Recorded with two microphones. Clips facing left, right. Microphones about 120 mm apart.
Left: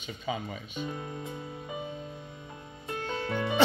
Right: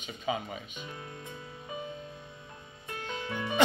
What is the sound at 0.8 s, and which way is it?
Speech, 15° left (ahead or behind).